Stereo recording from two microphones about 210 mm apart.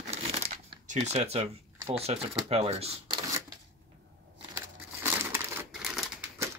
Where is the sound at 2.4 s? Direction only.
30° right (ahead or behind).